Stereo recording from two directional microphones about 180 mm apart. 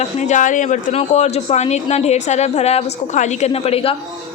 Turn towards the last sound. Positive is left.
turn(degrees=35)  # may be behind; listen again after turning